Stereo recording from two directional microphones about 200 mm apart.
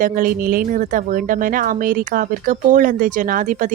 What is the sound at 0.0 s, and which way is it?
Speech, 45° right (ahead or behind).